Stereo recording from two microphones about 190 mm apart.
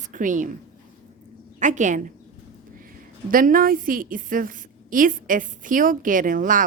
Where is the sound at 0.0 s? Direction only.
45° right (ahead or behind).